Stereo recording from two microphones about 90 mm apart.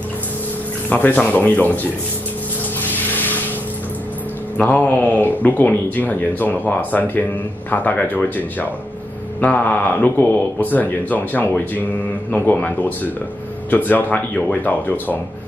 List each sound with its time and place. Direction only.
0.8 s speech: 20° left (ahead or behind)
4.6 s a man's voice: 15° left (ahead or behind)